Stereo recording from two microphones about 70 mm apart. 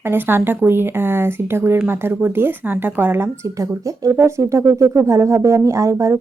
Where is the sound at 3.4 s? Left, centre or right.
Right.